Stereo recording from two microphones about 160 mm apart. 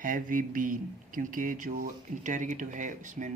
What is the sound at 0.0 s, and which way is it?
A man's voice, 60° right (ahead or behind).